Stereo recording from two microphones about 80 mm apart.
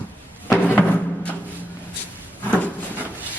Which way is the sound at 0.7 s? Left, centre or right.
Left.